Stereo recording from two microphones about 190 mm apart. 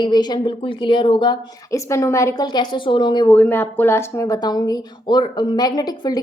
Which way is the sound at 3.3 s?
10° left (ahead or behind).